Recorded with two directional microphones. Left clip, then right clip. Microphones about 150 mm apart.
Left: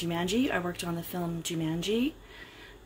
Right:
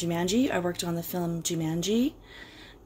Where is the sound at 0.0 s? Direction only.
25° right (ahead or behind).